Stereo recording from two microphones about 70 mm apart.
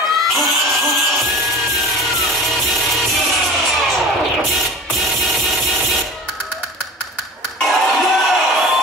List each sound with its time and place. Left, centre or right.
0.3 s music: centre
7.6 s music: centre